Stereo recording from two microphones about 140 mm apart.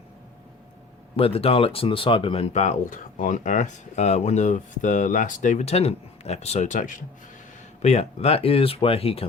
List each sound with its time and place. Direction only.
1.1 s speech: 45° left (ahead or behind); by 7.0 s 70° left (ahead or behind)
7.8 s speech: 50° left (ahead or behind)